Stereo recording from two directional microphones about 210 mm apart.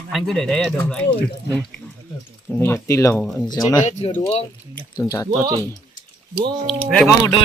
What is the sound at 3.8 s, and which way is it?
Speech, 35° left (ahead or behind).